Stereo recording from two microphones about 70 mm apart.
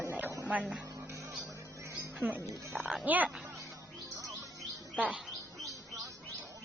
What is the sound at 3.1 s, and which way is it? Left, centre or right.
Speech, right.